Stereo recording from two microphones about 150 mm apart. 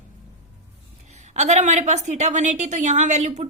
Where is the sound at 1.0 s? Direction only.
50° right (ahead or behind).